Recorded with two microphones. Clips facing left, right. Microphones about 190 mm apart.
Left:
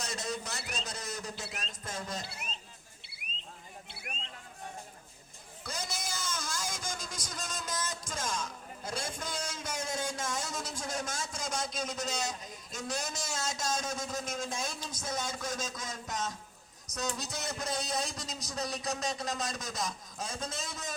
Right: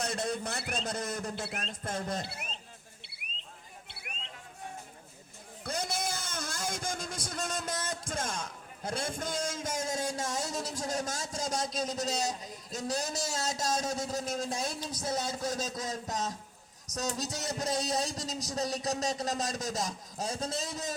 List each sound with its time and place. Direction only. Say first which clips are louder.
0.0 s a man's voice: right 4 dB; 55° right (ahead or behind)
5.6 s a man's voice: right 5 dB; 55° right (ahead or behind); by 20.9 s 35° right (ahead or behind)